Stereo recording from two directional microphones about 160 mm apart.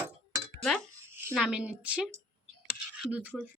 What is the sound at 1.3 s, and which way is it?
A woman's voice, 5° right (ahead or behind).